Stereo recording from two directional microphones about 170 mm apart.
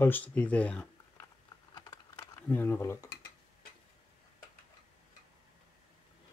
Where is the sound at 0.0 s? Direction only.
10° left (ahead or behind).